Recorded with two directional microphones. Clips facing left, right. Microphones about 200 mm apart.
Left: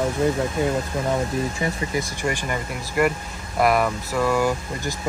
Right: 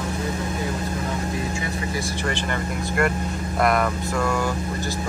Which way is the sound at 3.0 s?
Centre (ahead or behind).